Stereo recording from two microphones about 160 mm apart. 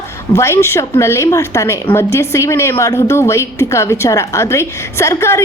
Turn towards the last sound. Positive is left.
turn(degrees=15)  # may be behind; listen again after turning